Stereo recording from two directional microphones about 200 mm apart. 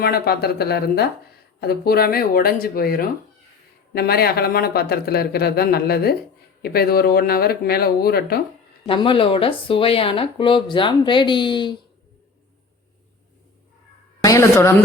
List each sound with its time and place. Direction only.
0.0 s speech: 50° left (ahead or behind)
8.9 s speech: 25° left (ahead or behind)
14.2 s a woman's voice: 15° left (ahead or behind)